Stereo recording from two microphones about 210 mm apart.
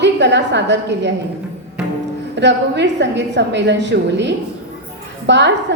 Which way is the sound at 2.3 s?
55° right (ahead or behind).